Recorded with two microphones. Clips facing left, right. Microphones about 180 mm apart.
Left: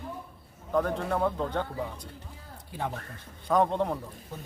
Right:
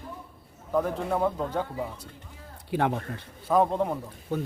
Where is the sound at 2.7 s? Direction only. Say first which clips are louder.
Right 9 dB; 75° right (ahead or behind).